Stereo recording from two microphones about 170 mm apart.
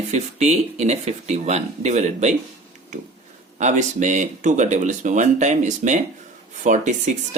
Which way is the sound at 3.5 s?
45° right (ahead or behind).